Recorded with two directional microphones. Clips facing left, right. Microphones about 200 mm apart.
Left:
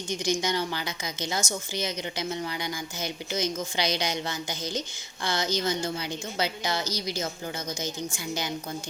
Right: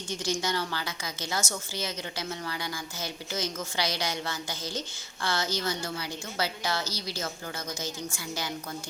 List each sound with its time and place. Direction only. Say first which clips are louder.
0.1 s a woman's voice: left 3 dB; 15° left (ahead or behind)